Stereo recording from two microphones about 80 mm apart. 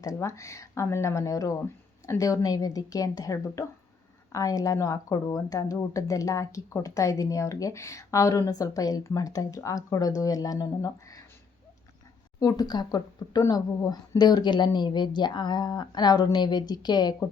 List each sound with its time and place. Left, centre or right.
0.0 s speech: left
12.4 s speech: left